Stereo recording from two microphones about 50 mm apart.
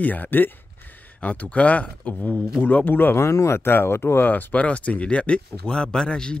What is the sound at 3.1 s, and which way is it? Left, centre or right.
Speech, left.